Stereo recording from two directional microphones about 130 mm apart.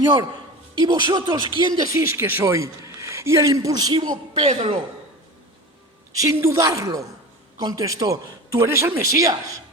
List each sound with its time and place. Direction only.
0.0 s a man's voice: 35° right (ahead or behind)
4.4 s a man's voice: 45° right (ahead or behind)
6.1 s speech: 20° right (ahead or behind)